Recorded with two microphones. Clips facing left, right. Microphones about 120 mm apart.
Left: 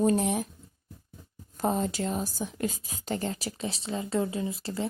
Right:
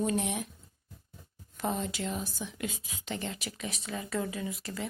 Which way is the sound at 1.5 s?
40° left (ahead or behind).